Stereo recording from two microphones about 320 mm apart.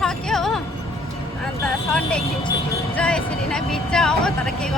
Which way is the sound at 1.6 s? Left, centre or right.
Centre.